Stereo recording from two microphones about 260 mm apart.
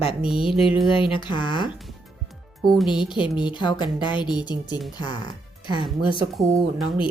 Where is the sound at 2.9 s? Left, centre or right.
Centre.